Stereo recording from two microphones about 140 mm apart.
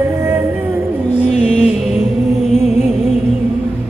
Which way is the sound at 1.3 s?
50° left (ahead or behind).